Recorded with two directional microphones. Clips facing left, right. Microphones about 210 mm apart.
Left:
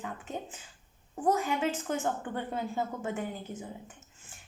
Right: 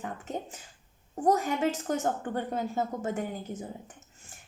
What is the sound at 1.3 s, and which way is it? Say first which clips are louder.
A woman's voice: right 3 dB; 40° right (ahead or behind).